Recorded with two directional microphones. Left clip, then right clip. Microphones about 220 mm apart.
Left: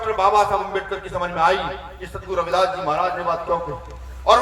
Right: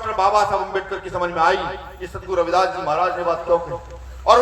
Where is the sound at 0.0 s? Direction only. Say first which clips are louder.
Even; 15° right (ahead or behind).